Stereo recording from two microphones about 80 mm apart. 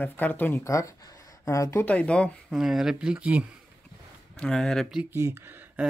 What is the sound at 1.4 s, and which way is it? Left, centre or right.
Speech, left.